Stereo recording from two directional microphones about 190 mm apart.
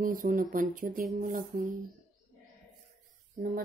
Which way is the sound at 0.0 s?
45° right (ahead or behind).